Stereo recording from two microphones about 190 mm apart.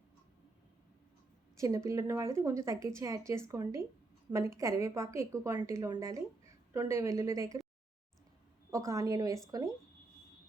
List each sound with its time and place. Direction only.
1.5 s a woman's voice: 15° right (ahead or behind)
8.7 s a woman's voice: 15° right (ahead or behind)